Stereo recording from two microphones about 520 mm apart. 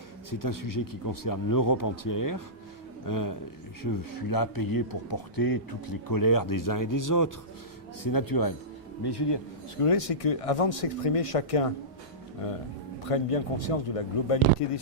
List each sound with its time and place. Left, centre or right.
0.3 s a man's voice: left
9.8 s speech: left